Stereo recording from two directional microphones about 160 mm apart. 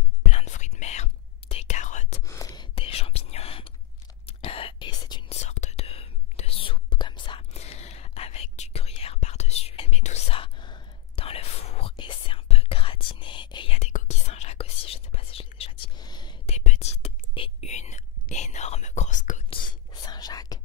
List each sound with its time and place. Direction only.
0.3 s whispering: 45° left (ahead or behind)
2.2 s whispering: 20° left (ahead or behind)
5.3 s whispering: 45° left (ahead or behind)
13.7 s whispering: 45° left (ahead or behind)
16.0 s whispering: 25° left (ahead or behind)
16.4 s whispering: 45° left (ahead or behind)
19.5 s whispering: 30° left (ahead or behind)